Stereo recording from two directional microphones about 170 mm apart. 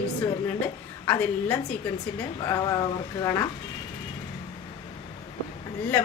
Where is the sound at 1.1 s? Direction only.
10° left (ahead or behind).